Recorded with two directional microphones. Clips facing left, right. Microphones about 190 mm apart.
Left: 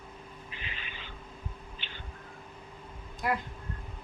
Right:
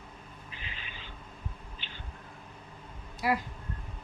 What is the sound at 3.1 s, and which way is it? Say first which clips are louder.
Bee: right 2 dB; 5° right (ahead or behind).